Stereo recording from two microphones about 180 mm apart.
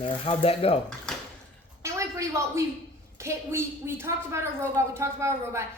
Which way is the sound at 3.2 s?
15° right (ahead or behind).